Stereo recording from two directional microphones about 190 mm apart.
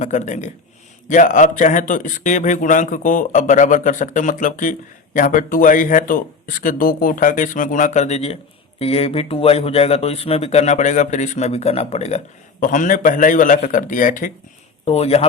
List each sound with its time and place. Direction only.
0.0 s a man's voice: 40° left (ahead or behind)
14.8 s speech: 30° left (ahead or behind)